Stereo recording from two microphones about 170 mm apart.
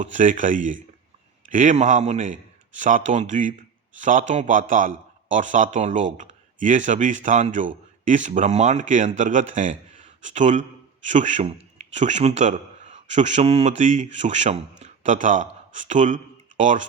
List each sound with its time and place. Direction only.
0.0 s a man's voice: 45° right (ahead or behind)